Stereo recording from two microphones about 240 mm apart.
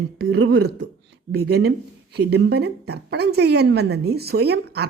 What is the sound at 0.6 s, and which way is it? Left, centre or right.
A woman's voice, right.